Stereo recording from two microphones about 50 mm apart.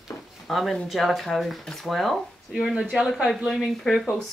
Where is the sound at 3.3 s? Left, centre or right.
Centre.